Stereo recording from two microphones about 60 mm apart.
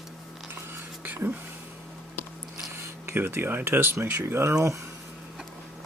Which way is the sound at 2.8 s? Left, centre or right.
Right.